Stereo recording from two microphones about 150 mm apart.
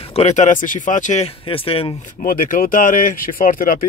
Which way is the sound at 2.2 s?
65° left (ahead or behind).